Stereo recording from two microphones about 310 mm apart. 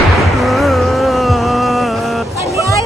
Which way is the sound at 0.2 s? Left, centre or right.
Centre.